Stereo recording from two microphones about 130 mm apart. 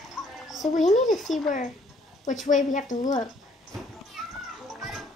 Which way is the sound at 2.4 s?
75° left (ahead or behind).